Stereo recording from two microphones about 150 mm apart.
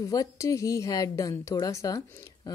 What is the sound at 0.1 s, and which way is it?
A woman's voice, 20° left (ahead or behind).